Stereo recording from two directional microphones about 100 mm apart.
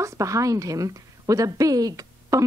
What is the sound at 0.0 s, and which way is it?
Speech, 30° right (ahead or behind).